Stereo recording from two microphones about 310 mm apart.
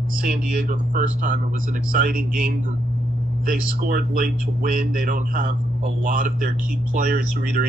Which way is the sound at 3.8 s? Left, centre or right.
Right.